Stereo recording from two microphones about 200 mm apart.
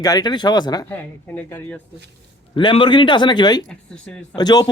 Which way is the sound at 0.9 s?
10° left (ahead or behind).